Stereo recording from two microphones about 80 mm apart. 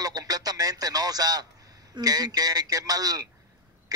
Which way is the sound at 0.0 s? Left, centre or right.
Right.